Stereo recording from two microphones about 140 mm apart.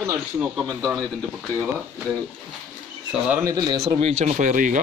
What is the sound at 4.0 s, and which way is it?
Speech, 50° right (ahead or behind).